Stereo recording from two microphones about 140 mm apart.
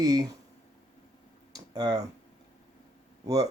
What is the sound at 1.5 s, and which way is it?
Speech, 30° right (ahead or behind).